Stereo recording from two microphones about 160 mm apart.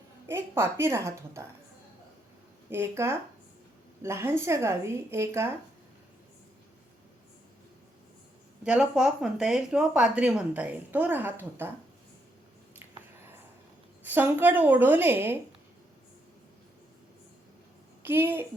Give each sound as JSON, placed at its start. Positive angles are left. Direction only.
{"t": 0.3, "sound": "speech", "side_deg": -15}
{"t": 2.6, "sound": "speech", "side_deg": -15}
{"t": 8.6, "sound": "speech", "side_deg": -5}
{"t": 12.8, "sound": "a sound", "side_deg": -15}
{"t": 14.1, "sound": "speech", "side_deg": -10}
{"t": 18.0, "sound": "a woman's voice", "side_deg": -15}